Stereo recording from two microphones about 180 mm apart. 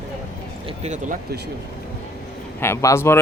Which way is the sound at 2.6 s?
15° left (ahead or behind).